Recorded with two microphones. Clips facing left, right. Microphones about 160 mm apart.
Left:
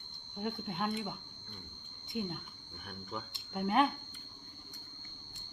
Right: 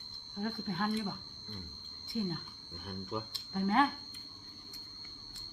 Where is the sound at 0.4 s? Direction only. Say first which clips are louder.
Right 1 dB; 20° left (ahead or behind).